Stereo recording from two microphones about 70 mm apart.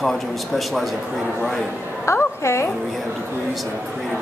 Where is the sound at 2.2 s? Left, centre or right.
Left.